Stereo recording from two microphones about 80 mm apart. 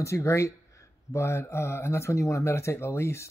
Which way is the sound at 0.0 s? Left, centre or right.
Left.